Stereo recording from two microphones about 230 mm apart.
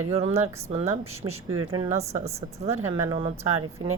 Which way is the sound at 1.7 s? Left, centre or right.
Centre.